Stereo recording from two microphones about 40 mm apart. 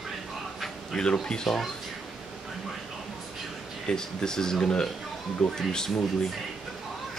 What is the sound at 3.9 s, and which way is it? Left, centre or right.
Speech, centre.